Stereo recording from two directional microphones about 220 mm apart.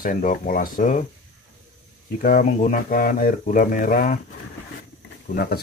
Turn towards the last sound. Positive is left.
turn(degrees=45)  # may be behind; listen again after turning